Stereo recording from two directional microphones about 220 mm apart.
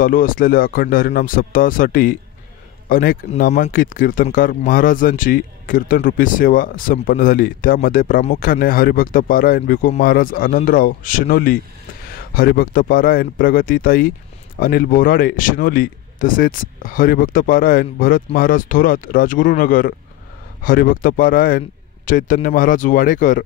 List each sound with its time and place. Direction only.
0.0 s speech: 40° left (ahead or behind)